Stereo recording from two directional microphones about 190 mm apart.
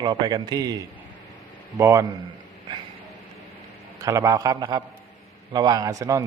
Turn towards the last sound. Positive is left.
turn(degrees=-15)  # may be behind; listen again after turning